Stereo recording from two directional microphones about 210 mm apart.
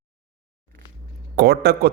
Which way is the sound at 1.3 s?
50° right (ahead or behind).